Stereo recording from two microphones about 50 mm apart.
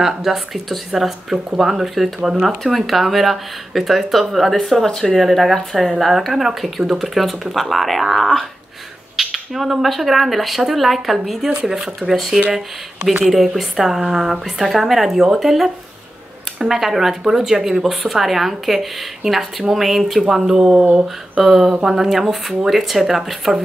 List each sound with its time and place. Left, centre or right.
0.0 s speech: centre
20.7 s speech: right
21.4 s speech: centre